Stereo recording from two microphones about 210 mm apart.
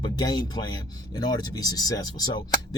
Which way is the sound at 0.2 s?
20° left (ahead or behind).